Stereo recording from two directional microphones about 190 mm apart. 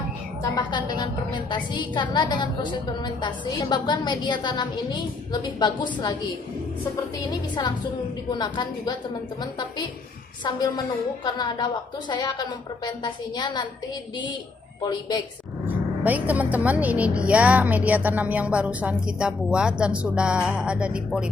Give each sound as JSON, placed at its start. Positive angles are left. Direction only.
{"t": 0.4, "sound": "a woman's voice", "side_deg": 25}
{"t": 8.3, "sound": "a woman's voice", "side_deg": 20}
{"t": 14.8, "sound": "a woman's voice", "side_deg": 20}
{"t": 15.6, "sound": "a woman's voice", "side_deg": -10}